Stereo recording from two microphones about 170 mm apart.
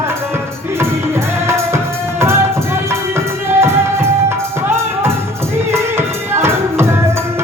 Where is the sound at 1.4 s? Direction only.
15° right (ahead or behind).